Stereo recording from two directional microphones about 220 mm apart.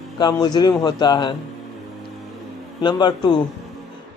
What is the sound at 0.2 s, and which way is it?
Speech, 20° left (ahead or behind).